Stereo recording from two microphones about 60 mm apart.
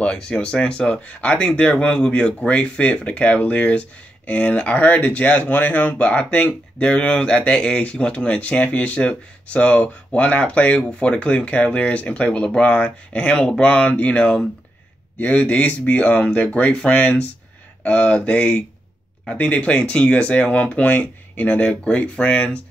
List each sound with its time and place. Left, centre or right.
0.0 s speech: centre